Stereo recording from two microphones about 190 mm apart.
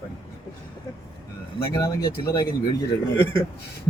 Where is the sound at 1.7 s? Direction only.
20° left (ahead or behind).